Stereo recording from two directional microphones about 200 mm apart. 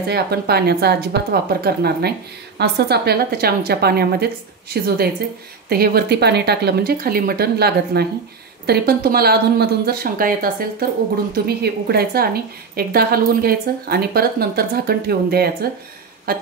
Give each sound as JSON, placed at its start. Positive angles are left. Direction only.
{"t": 0.1, "sound": "speech", "side_deg": -55}